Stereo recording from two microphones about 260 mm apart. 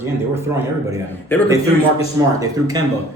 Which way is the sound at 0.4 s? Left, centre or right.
Centre.